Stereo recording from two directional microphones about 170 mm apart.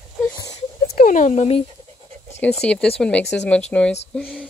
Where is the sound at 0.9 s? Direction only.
55° left (ahead or behind).